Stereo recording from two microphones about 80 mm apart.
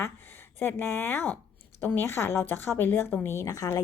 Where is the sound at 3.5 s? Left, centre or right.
Left.